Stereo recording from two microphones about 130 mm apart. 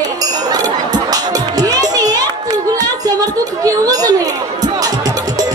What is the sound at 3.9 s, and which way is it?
Chatter, 30° right (ahead or behind).